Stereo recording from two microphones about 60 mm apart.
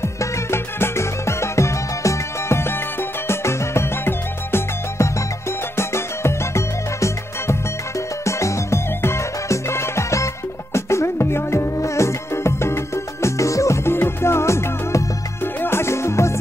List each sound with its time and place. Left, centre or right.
0.0 s music: left
13.8 s music: left
15.4 s music: left